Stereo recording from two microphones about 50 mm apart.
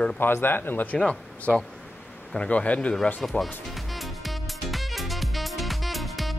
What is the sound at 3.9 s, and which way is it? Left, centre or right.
Music, centre.